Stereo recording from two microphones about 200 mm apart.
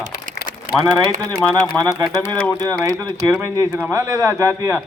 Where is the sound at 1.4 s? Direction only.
10° left (ahead or behind).